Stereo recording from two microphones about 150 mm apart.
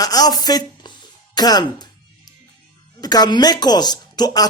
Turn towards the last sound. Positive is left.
turn(degrees=25)  # may be behind; listen again after turning